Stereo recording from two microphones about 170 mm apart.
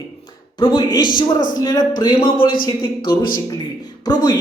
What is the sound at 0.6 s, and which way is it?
Speech, 25° left (ahead or behind).